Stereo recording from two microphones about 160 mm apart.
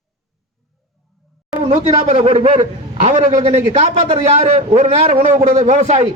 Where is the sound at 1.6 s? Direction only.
40° right (ahead or behind).